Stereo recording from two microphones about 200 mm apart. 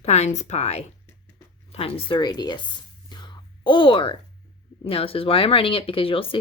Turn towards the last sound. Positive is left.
turn(degrees=25)  # may be behind; listen again after turning